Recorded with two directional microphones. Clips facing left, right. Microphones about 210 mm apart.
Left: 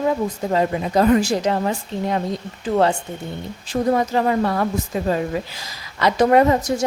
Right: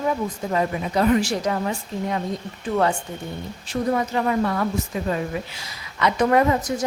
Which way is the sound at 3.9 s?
35° left (ahead or behind).